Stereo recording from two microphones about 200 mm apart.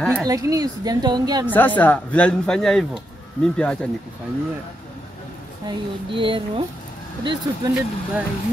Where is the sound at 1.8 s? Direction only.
5° left (ahead or behind).